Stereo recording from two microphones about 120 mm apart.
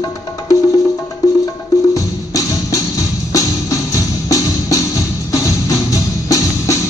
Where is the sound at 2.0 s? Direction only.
30° left (ahead or behind).